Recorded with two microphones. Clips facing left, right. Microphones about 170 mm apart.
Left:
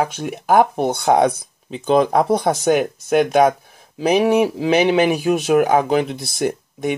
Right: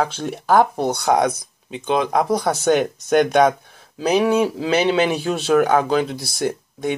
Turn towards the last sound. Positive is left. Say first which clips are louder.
# left 2 dB
turn(degrees=20)  # may be behind; listen again after turning